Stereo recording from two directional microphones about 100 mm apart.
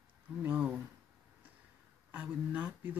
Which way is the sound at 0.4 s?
15° right (ahead or behind).